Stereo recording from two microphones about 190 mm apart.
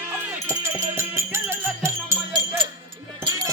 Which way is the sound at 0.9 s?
15° right (ahead or behind).